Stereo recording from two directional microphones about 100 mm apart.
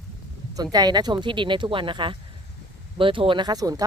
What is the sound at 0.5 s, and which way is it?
Speech, 40° right (ahead or behind).